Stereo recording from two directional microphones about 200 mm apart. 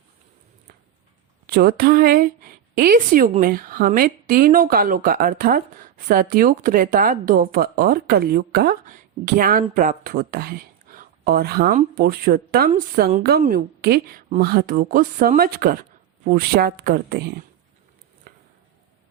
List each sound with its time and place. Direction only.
1.5 s speech: 50° right (ahead or behind)